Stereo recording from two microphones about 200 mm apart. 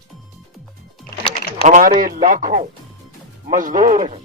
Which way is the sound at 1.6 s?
40° right (ahead or behind).